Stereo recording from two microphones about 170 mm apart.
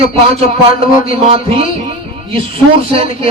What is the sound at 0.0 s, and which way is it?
A man's voice, 35° right (ahead or behind).